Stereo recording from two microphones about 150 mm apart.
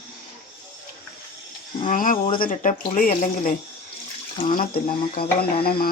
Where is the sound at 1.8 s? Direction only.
65° left (ahead or behind).